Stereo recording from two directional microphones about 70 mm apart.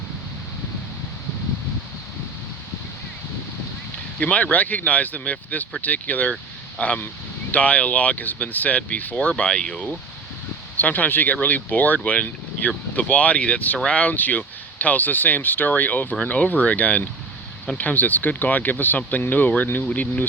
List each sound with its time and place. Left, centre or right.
4.2 s speech: centre
10.8 s speech: left